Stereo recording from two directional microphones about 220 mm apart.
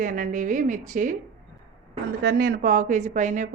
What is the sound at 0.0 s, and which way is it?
A woman's voice, 35° right (ahead or behind).